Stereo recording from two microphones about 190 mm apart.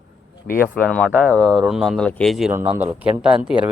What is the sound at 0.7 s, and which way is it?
Speech, 5° left (ahead or behind).